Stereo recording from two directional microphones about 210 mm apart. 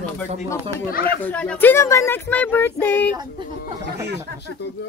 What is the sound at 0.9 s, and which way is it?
Speech, 45° left (ahead or behind).